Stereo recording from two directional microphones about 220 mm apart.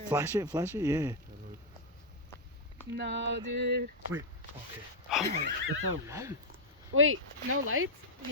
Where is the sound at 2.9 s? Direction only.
50° right (ahead or behind).